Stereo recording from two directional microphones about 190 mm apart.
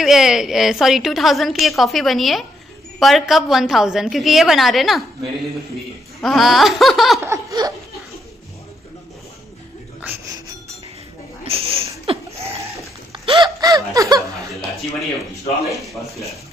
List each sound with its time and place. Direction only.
0.0 s a woman's voice: centre (ahead or behind)
7.2 s laughter: 20° right (ahead or behind)
11.4 s a sound: 30° right (ahead or behind)
13.1 s laughter: 25° right (ahead or behind)
15.6 s a woman's voice: centre (ahead or behind)